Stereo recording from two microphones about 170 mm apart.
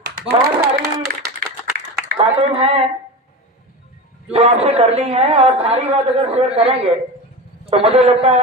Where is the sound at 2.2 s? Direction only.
35° right (ahead or behind).